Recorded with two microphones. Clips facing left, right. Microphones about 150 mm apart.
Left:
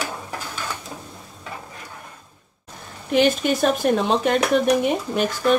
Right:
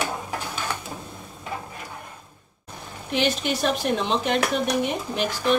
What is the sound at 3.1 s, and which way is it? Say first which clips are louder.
Speech: left 6 dB; 50° left (ahead or behind).